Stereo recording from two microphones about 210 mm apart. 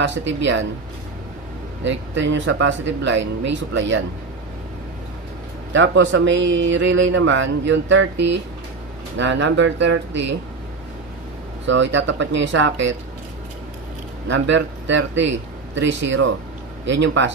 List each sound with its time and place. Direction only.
0.0 s speech: 60° right (ahead or behind)
1.9 s speech: 60° right (ahead or behind)
5.7 s speech: 60° right (ahead or behind)
9.1 s speech: 60° right (ahead or behind)
11.6 s speech: 60° right (ahead or behind)
14.2 s speech: 60° right (ahead or behind)